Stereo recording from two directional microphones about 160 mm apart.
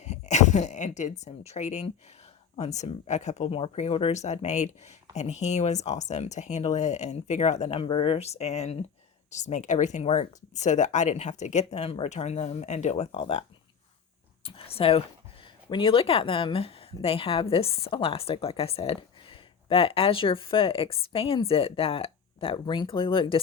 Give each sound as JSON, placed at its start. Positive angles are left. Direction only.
{"t": 0.0, "sound": "speech", "side_deg": 45}
{"t": 14.4, "sound": "a woman's voice", "side_deg": 35}